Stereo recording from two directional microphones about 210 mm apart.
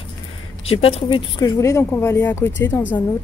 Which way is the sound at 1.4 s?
15° left (ahead or behind).